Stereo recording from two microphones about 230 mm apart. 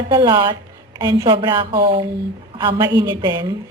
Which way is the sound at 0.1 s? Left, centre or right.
Centre.